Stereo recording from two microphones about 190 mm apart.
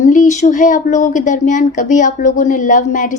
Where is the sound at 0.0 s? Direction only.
40° left (ahead or behind).